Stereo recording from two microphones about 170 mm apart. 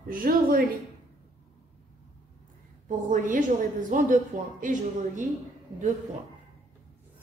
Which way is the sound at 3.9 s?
50° right (ahead or behind).